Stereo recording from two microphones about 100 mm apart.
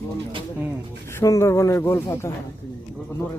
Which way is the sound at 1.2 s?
30° left (ahead or behind).